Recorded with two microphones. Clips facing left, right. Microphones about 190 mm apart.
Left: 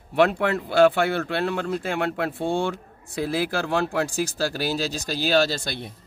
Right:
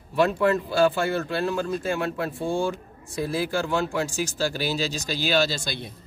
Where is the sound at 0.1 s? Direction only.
70° left (ahead or behind).